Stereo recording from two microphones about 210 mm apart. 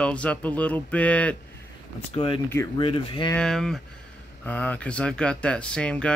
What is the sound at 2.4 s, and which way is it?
Speech, 15° left (ahead or behind).